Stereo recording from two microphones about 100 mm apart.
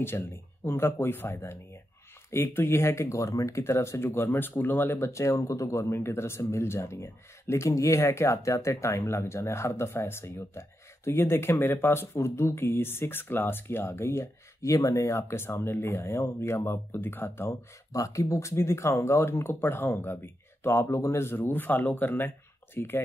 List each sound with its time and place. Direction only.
0.7 s speech: 25° left (ahead or behind)